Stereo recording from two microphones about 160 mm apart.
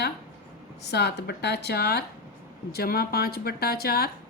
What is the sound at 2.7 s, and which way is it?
A woman's voice, 75° left (ahead or behind).